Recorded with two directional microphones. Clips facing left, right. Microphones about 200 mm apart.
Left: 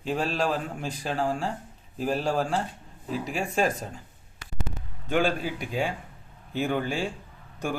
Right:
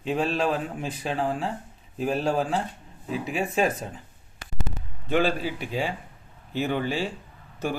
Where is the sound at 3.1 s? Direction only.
40° left (ahead or behind).